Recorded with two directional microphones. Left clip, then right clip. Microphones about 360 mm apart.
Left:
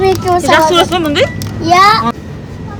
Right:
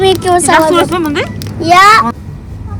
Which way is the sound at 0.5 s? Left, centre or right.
Centre.